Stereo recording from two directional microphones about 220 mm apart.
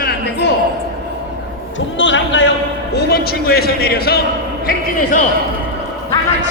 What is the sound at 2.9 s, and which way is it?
A man's voice, 45° left (ahead or behind).